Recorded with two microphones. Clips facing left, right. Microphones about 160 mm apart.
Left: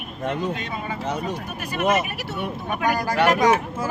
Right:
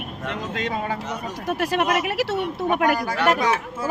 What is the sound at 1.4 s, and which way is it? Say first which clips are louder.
Speech: right 3 dB; 90° right.